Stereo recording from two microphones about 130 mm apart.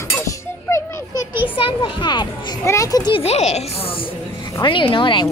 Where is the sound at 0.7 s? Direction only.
20° left (ahead or behind).